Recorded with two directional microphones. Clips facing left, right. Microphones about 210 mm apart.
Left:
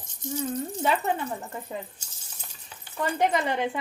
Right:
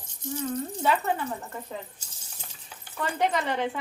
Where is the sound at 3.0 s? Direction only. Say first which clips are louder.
Left 2 dB; 15° left (ahead or behind).